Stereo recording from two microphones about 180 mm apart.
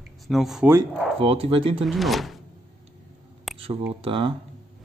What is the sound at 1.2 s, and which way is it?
Speech, 30° right (ahead or behind).